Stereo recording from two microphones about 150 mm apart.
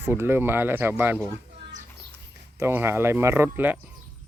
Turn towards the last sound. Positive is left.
turn(degrees=-15)  # may be behind; listen again after turning